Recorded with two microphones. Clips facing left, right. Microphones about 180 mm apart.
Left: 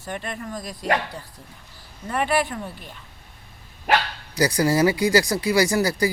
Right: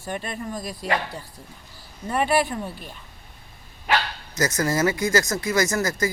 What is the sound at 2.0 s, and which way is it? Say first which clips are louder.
Speech: right 1 dB; 20° right (ahead or behind).